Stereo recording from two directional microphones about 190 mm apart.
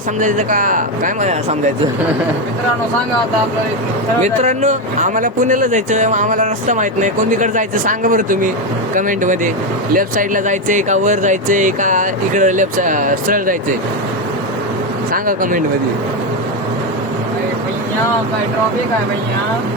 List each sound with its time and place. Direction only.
0.2 s speech: 40° right (ahead or behind)
4.2 s speech: 40° right (ahead or behind)
15.1 s speech: 45° right (ahead or behind)